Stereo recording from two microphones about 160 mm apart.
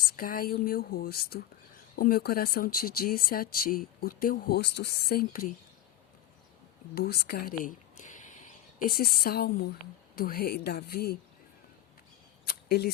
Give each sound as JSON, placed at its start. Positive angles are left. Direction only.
{"t": 0.2, "sound": "speech", "side_deg": 65}
{"t": 6.9, "sound": "speech", "side_deg": 75}
{"t": 12.5, "sound": "a sound", "side_deg": 80}